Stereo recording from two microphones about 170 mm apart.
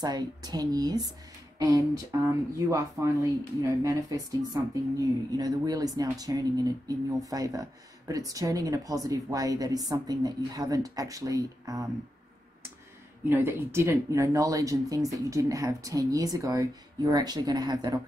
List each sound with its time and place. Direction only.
0.0 s speech: 25° right (ahead or behind)
13.3 s speech: 15° right (ahead or behind)